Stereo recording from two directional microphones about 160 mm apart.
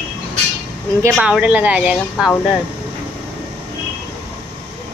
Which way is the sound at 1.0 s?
10° right (ahead or behind).